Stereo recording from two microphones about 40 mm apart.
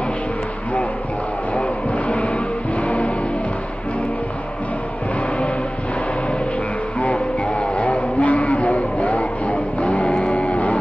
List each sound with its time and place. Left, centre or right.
1.5 s music: left
7.0 s a sound: left
10.4 s music: left